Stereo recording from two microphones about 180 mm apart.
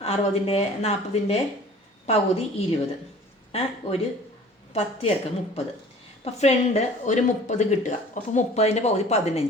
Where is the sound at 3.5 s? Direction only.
35° left (ahead or behind).